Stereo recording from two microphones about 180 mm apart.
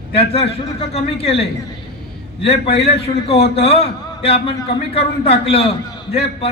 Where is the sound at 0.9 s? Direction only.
35° left (ahead or behind).